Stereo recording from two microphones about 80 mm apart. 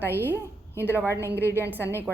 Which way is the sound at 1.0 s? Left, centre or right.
Left.